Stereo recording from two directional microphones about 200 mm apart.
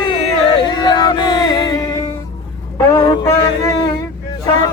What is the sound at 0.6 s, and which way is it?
Music, 20° left (ahead or behind).